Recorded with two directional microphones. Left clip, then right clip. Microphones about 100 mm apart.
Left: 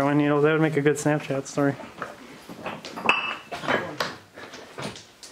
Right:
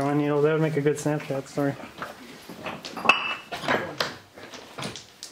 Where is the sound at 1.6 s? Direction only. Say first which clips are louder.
Left 3 dB; 25° left (ahead or behind).